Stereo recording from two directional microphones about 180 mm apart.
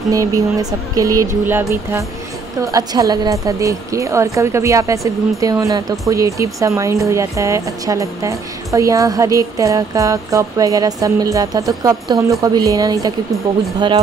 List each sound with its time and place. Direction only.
0.1 s a woman's voice: 20° right (ahead or behind)